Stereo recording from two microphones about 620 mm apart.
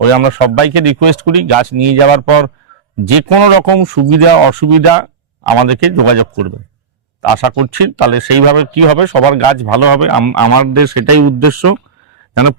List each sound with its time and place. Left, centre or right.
0.0 s speech: right